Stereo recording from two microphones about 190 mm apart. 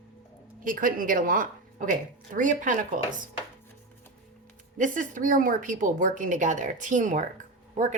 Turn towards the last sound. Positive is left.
turn(degrees=-40)  # may be behind; listen again after turning